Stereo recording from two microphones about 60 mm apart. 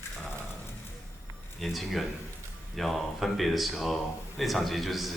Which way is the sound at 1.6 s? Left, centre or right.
Centre.